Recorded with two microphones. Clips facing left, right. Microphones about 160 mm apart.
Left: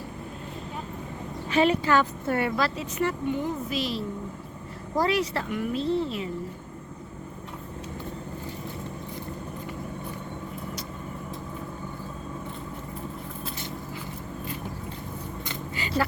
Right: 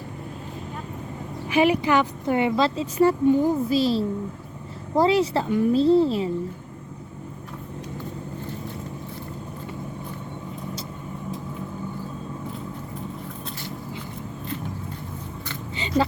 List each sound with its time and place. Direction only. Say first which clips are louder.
1.5 s speech: right 2 dB; 10° right (ahead or behind); by 6.3 s 30° right (ahead or behind)